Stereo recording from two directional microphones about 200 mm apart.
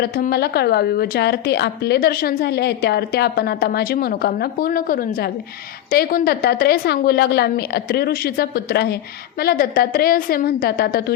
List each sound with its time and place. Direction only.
0.0 s a woman's voice: 50° left (ahead or behind)